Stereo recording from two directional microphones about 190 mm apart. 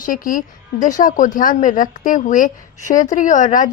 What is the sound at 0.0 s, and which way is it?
A woman's voice, 45° left (ahead or behind).